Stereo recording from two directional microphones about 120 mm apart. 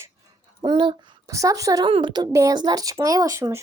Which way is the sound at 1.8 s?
45° right (ahead or behind).